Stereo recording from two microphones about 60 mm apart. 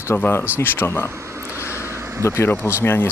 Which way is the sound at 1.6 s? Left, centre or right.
Left.